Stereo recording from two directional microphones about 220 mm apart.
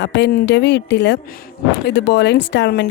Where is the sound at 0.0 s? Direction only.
50° left (ahead or behind).